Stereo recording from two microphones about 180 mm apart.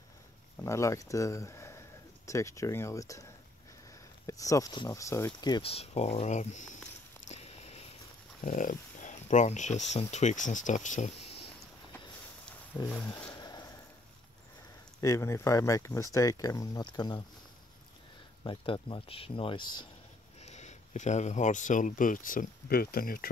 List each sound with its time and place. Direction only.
0.6 s speech: 15° left (ahead or behind)
4.3 s speech: 20° left (ahead or behind); by 6.8 s 40° left (ahead or behind)
7.2 s a sound: 35° left (ahead or behind)
8.4 s speech: 45° left (ahead or behind)
12.4 s wild animals: 5° left (ahead or behind)
13.3 s a sound: 20° left (ahead or behind)
15.0 s speech: 15° left (ahead or behind)
18.4 s speech: 25° left (ahead or behind)
20.3 s speech: 40° left (ahead or behind); by 23.3 s 55° left (ahead or behind)